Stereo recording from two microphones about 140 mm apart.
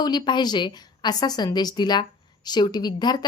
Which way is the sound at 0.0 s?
30° left (ahead or behind).